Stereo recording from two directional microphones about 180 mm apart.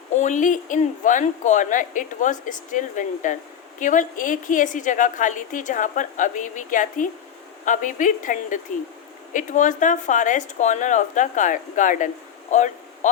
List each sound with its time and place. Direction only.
0.1 s speech: 45° left (ahead or behind)